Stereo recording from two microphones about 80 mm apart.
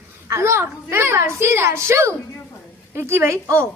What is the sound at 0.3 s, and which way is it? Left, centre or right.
A woman's voice, right.